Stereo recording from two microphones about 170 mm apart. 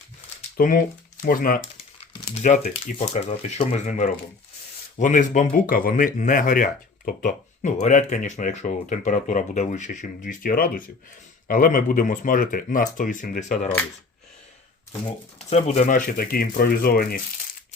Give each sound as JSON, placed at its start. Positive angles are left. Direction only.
{"t": 0.5, "sound": "speech", "side_deg": 55}
{"t": 2.3, "sound": "speech", "side_deg": 45}
{"t": 15.4, "sound": "speech", "side_deg": 40}